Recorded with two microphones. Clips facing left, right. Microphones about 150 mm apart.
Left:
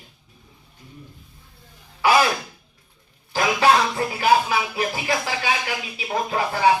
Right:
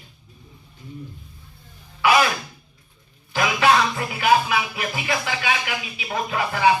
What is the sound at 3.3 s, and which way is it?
Music, 30° left (ahead or behind).